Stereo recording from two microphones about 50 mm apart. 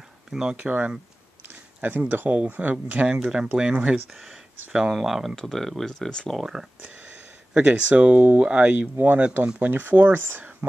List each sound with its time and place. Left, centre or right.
0.3 s speech: centre
0.6 s speech: right
1.5 s speech: right
4.1 s speech: centre
5.3 s speech: centre
6.3 s speech: centre
7.5 s speech: right
8.0 s speech: right
8.5 s speech: right
8.7 s speech: right